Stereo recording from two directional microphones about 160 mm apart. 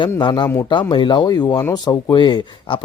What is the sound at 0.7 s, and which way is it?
Speech, 30° left (ahead or behind).